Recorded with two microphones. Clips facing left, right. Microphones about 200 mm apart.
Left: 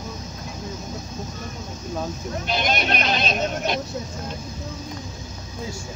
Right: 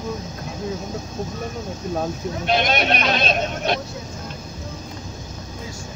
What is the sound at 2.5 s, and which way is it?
Speech, 65° right (ahead or behind).